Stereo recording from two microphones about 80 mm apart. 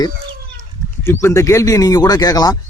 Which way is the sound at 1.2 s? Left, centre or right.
Left.